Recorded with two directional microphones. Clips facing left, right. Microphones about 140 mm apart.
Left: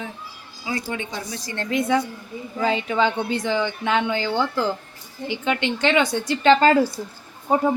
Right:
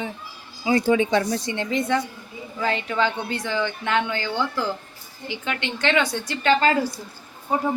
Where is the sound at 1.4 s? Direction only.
15° right (ahead or behind).